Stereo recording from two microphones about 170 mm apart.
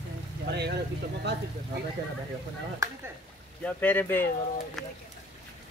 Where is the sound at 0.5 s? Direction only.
80° right.